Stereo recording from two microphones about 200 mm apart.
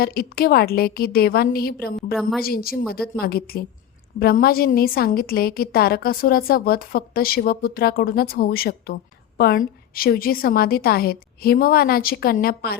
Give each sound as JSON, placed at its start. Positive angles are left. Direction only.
{"t": 0.0, "sound": "a woman's voice", "side_deg": 50}